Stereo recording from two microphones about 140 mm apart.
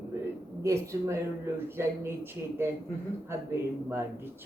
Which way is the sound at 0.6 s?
20° right (ahead or behind).